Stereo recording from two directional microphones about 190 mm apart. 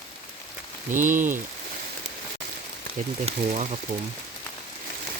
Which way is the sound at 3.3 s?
35° right (ahead or behind).